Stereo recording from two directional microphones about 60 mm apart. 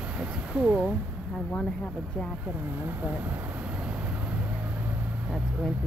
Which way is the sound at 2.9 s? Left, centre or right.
Right.